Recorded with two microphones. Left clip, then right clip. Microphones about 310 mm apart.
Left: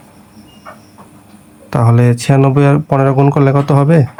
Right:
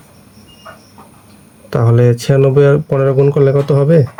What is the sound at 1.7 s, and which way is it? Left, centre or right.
Speech, centre.